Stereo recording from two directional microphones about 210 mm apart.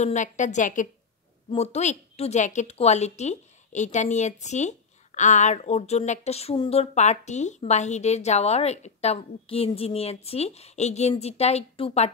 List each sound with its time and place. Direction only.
0.0 s a woman's voice: 35° left (ahead or behind)